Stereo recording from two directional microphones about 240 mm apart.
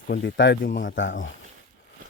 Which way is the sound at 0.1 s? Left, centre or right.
Left.